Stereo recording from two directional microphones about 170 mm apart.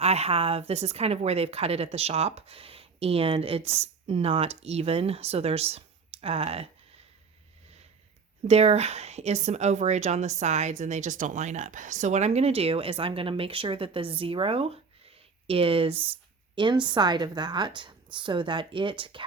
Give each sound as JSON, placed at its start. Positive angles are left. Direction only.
{"t": 0.0, "sound": "a woman's voice", "side_deg": -40}
{"t": 8.4, "sound": "a woman's voice", "side_deg": -40}